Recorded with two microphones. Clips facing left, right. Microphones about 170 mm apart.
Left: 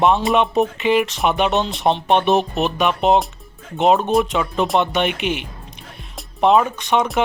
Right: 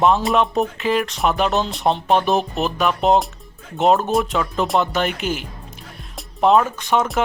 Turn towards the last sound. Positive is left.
turn(degrees=0)  # may be behind; listen again after turning